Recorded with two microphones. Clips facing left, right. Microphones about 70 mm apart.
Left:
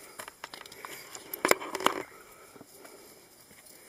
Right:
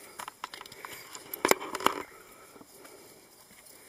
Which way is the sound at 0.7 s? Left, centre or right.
Centre.